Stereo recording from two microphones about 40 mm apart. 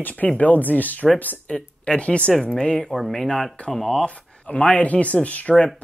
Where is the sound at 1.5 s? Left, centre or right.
Left.